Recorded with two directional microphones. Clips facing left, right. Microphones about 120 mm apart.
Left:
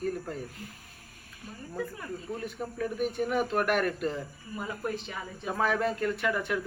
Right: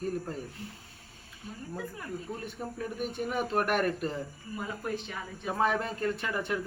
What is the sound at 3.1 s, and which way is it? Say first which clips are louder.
Speech: right 1 dB; 30° right (ahead or behind).